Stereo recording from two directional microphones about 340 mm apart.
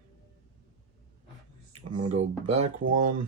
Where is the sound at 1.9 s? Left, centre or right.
Centre.